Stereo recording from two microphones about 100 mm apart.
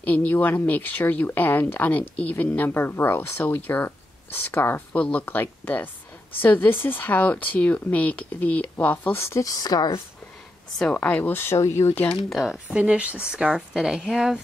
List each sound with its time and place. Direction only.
0.0 s speech: 15° left (ahead or behind)
9.2 s speech: 30° left (ahead or behind)
10.8 s speech: 15° left (ahead or behind)
12.3 s speech: centre (ahead or behind)
12.7 s speech: 10° right (ahead or behind)